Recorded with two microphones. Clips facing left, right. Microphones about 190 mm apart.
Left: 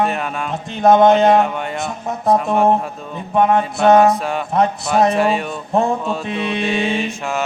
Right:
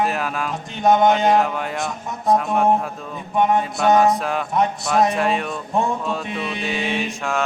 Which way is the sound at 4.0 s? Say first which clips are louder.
Left 3 dB; centre (ahead or behind).